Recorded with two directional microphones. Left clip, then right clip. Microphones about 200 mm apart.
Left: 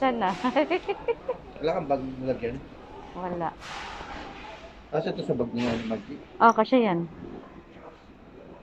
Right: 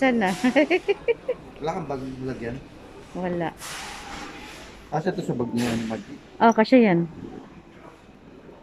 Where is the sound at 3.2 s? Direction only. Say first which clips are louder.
Right 3 dB; 35° right (ahead or behind).